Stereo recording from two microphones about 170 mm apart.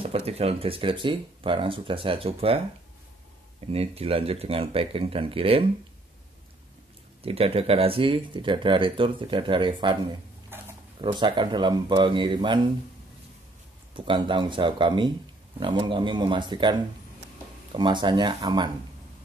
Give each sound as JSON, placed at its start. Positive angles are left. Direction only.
{"t": 0.0, "sound": "speech", "side_deg": -35}
{"t": 3.6, "sound": "speech", "side_deg": -35}
{"t": 7.2, "sound": "speech", "side_deg": -35}
{"t": 10.5, "sound": "a sound", "side_deg": -15}
{"t": 11.0, "sound": "speech", "side_deg": -30}
{"t": 13.9, "sound": "speech", "side_deg": -30}
{"t": 17.7, "sound": "speech", "side_deg": -25}